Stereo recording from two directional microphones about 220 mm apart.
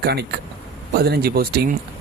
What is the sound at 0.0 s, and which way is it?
Speech, 45° right (ahead or behind).